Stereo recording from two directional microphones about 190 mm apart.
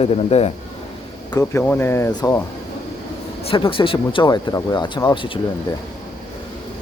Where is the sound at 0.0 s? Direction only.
35° left (ahead or behind).